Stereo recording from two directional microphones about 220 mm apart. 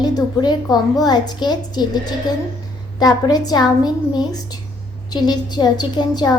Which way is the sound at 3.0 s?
15° left (ahead or behind).